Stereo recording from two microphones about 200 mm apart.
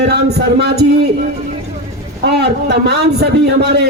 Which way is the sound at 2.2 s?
55° right (ahead or behind).